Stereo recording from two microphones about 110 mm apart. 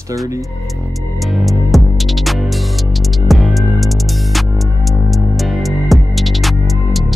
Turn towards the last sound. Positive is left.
turn(degrees=0)  # may be behind; listen again after turning